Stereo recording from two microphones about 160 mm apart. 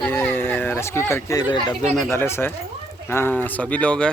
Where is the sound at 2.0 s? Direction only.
15° left (ahead or behind).